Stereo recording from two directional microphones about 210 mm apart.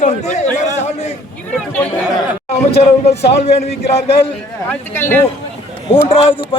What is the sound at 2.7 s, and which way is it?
Speech, 30° left (ahead or behind).